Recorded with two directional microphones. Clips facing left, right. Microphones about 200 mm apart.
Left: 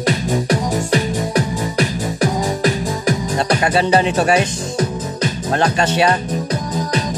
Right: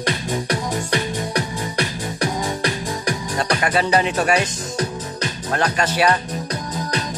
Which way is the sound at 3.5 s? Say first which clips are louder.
Left 4 dB; 30° left (ahead or behind).